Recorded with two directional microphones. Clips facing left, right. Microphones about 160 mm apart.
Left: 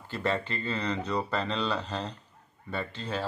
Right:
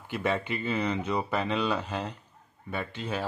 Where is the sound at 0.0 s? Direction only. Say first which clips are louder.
Right 1 dB; 15° right (ahead or behind).